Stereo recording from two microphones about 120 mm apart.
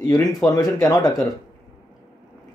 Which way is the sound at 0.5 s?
30° left (ahead or behind).